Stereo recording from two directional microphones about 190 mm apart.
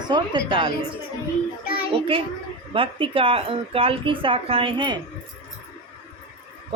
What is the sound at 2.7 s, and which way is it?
A woman's voice, 25° right (ahead or behind).